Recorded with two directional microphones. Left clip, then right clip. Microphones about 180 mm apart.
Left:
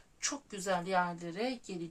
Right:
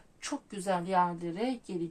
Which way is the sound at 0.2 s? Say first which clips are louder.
Even; 20° left (ahead or behind).